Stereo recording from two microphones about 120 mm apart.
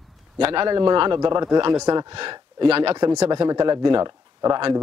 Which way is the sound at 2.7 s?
55° right (ahead or behind).